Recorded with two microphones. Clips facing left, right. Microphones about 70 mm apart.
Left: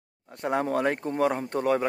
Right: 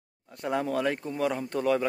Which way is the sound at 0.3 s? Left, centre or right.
Left.